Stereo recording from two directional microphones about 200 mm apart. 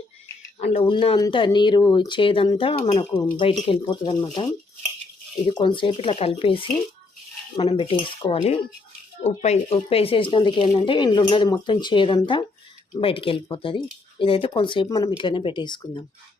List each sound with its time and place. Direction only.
0.6 s speech: 30° left (ahead or behind)
5.5 s speech: 25° left (ahead or behind)